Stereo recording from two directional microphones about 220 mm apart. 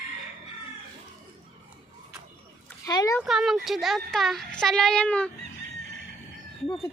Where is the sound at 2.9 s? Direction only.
15° left (ahead or behind).